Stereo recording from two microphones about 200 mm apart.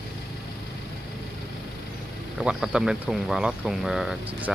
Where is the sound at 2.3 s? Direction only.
5° right (ahead or behind).